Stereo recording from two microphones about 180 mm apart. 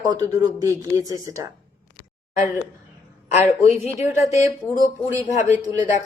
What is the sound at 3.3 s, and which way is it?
A woman's voice, 40° left (ahead or behind).